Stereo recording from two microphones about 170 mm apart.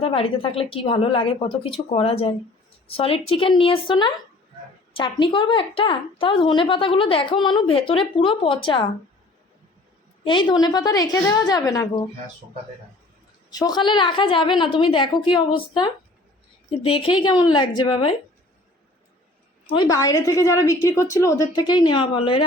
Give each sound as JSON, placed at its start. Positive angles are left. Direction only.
{"t": 0.0, "sound": "a woman's voice", "side_deg": 35}
{"t": 10.2, "sound": "a woman's voice", "side_deg": 25}
{"t": 13.5, "sound": "a woman's voice", "side_deg": 20}
{"t": 16.7, "sound": "a woman's voice", "side_deg": 35}
{"t": 19.6, "sound": "a woman's voice", "side_deg": 25}